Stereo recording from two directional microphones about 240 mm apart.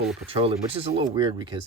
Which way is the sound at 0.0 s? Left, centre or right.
Centre.